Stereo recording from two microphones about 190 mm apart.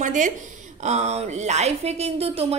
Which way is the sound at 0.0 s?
40° right (ahead or behind).